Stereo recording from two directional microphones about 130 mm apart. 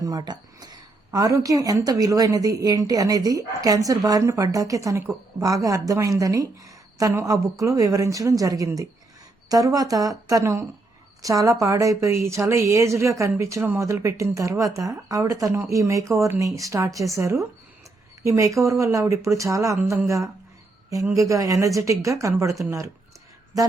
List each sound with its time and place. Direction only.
0.0 s a woman's voice: 30° right (ahead or behind)